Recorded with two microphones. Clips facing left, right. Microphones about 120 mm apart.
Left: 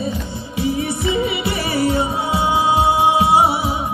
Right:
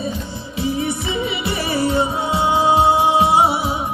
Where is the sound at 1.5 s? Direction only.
25° right (ahead or behind).